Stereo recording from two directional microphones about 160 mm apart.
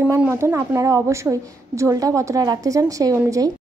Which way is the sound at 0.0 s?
10° right (ahead or behind).